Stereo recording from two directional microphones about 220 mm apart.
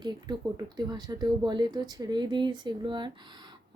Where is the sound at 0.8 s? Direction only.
20° right (ahead or behind).